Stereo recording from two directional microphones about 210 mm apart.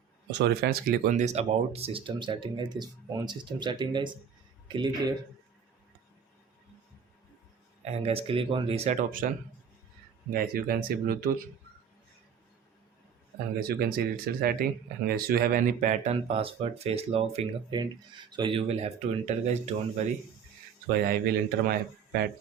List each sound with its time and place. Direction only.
0.3 s speech: 55° right (ahead or behind); by 5.1 s 20° right (ahead or behind)
7.9 s speech: 30° right (ahead or behind)
9.2 s speech: 40° right (ahead or behind)
13.6 s speech: 45° right (ahead or behind)
21.1 s speech: 45° right (ahead or behind)